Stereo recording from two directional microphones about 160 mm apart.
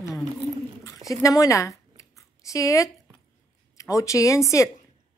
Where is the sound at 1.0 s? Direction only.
20° left (ahead or behind).